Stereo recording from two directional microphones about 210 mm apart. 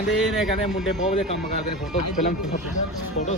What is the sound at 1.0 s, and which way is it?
Speech, 35° left (ahead or behind).